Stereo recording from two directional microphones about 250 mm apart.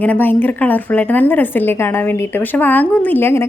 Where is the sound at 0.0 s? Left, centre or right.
Centre.